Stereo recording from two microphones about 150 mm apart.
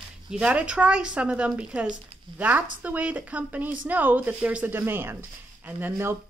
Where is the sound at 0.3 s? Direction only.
5° right (ahead or behind).